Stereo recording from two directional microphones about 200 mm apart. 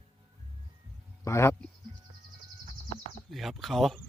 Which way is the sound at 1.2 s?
15° left (ahead or behind).